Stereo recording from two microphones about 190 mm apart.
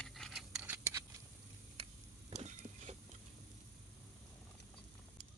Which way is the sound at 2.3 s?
40° right (ahead or behind).